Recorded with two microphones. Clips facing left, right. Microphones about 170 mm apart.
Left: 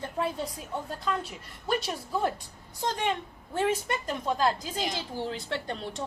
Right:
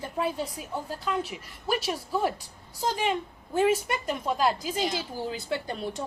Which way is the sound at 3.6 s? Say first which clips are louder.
Right 4 dB; 10° right (ahead or behind).